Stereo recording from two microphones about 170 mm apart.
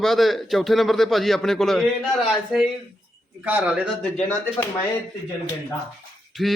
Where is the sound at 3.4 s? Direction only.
10° right (ahead or behind).